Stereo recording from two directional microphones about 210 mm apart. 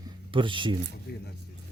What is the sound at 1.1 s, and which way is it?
Speech, 50° left (ahead or behind).